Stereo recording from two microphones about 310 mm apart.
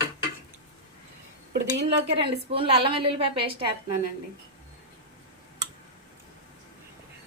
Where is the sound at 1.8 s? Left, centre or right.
Centre.